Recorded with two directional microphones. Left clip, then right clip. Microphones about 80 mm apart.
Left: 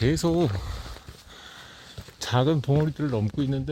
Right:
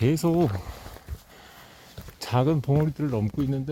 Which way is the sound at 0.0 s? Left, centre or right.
Right.